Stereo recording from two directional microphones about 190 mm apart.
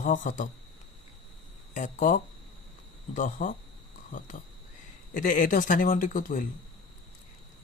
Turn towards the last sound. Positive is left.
turn(degrees=45)  # may be behind; listen again after turning